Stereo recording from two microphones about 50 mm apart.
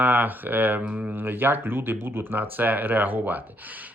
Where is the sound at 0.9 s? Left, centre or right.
Right.